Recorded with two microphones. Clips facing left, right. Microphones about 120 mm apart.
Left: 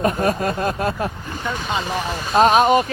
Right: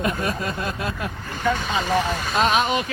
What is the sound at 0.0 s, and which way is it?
Speech, 40° left (ahead or behind).